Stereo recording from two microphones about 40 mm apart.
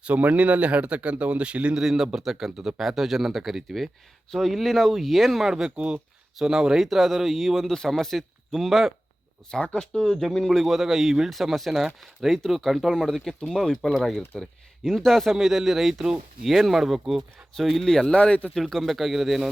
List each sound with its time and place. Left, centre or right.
0.0 s speech: right
1.8 s speech: centre
5.7 s speech: right
6.4 s speech: centre
6.7 s speech: centre
9.7 s speech: centre
10.6 s speech: centre
12.9 s speech: centre
17.8 s speech: centre
18.5 s speech: centre